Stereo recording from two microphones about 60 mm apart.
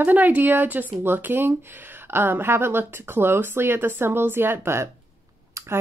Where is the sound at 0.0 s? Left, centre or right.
Right.